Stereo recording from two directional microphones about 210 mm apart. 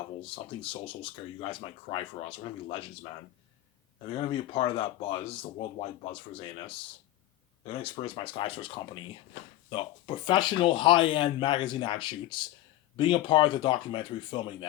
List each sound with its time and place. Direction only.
0.2 s speech: 25° left (ahead or behind)
4.1 s speech: 25° left (ahead or behind)